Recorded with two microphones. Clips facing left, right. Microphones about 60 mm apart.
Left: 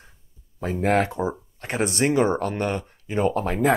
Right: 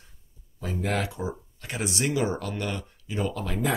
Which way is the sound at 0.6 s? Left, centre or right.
Left.